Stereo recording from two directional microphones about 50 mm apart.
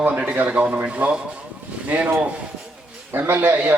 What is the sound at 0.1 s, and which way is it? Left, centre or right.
A man's voice, centre.